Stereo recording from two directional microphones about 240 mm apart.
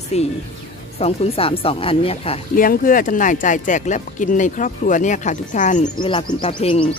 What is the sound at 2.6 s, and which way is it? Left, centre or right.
Speech, left.